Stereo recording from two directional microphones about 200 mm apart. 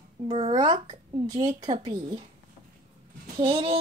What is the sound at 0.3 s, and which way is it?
A woman's voice, 25° right (ahead or behind).